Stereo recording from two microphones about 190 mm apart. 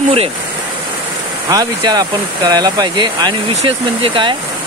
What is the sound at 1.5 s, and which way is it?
Speech, 20° right (ahead or behind).